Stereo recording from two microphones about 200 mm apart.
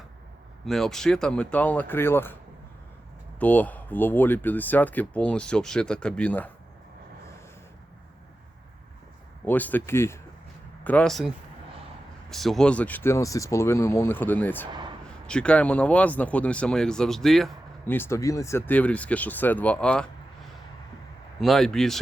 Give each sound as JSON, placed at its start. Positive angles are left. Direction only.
{"t": 0.6, "sound": "speech", "side_deg": 0}
{"t": 3.4, "sound": "speech", "side_deg": 5}
{"t": 9.5, "sound": "speech", "side_deg": 10}
{"t": 12.3, "sound": "speech", "side_deg": 0}
{"t": 14.7, "sound": "a sound", "side_deg": -20}
{"t": 15.3, "sound": "speech", "side_deg": 5}
{"t": 21.4, "sound": "speech", "side_deg": 0}